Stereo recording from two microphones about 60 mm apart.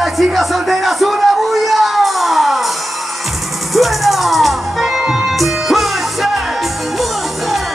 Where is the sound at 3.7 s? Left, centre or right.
Centre.